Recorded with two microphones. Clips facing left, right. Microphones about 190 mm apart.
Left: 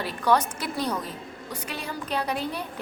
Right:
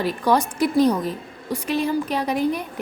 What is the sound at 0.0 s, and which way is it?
Speech, 15° right (ahead or behind).